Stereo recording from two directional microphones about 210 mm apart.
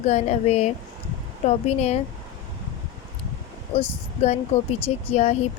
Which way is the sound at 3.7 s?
30° left (ahead or behind).